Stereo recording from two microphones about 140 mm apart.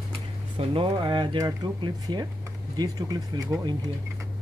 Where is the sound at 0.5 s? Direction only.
35° right (ahead or behind).